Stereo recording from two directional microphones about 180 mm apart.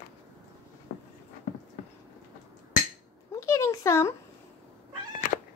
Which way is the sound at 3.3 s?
15° left (ahead or behind).